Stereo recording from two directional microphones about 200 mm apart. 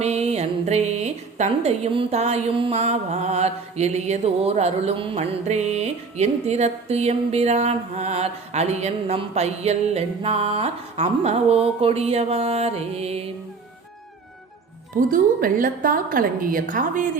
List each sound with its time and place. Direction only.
0.0 s a woman's voice: 30° right (ahead or behind)
15.1 s a woman's voice: 45° right (ahead or behind)